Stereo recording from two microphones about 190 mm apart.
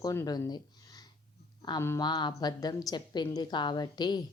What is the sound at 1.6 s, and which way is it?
Speech, 15° left (ahead or behind).